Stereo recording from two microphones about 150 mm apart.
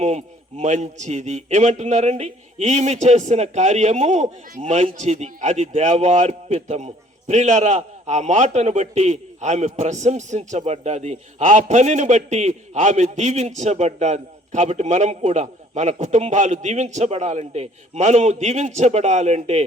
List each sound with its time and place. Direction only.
0.0 s a man's voice: 50° right (ahead or behind)